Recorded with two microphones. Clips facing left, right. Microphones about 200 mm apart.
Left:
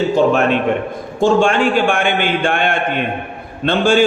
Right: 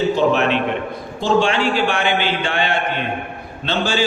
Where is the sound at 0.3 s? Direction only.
45° left (ahead or behind).